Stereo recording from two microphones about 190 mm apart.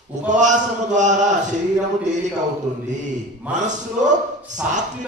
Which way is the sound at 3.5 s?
40° right (ahead or behind).